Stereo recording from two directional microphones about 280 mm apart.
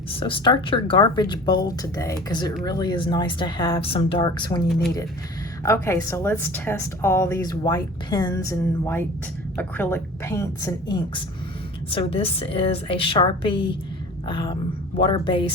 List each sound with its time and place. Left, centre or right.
0.1 s a woman's voice: centre
5.6 s a woman's voice: centre